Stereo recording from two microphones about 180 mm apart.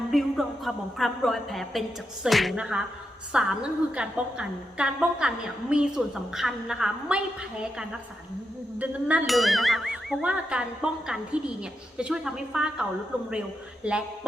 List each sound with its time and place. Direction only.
0.1 s speech: centre (ahead or behind)
2.2 s ding: centre (ahead or behind)
8.8 s ding: 10° right (ahead or behind)
13.8 s speech: 5° right (ahead or behind)